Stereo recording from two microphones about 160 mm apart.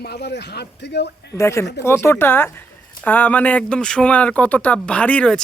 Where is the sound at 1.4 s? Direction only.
20° left (ahead or behind).